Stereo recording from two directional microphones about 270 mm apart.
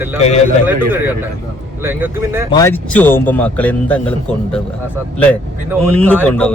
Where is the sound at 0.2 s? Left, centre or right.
Left.